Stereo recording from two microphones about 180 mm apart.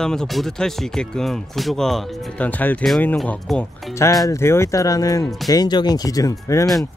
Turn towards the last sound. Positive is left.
turn(degrees=20)  # may be behind; listen again after turning